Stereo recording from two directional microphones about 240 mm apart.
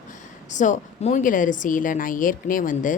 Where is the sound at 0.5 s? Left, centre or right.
Left.